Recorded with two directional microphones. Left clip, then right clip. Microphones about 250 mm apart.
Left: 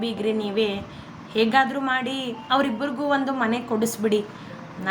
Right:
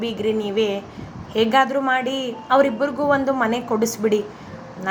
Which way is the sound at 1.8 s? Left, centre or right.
Centre.